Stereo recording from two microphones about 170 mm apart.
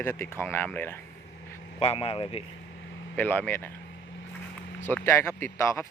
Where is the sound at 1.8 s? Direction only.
35° left (ahead or behind).